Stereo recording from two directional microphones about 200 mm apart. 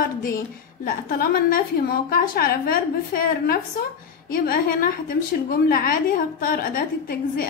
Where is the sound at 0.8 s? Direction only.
45° left (ahead or behind).